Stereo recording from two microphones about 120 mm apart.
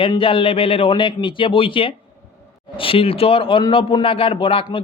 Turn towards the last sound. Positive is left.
turn(degrees=45)  # may be behind; listen again after turning